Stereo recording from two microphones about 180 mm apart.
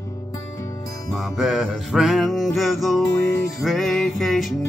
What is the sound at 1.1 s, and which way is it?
Music, centre (ahead or behind).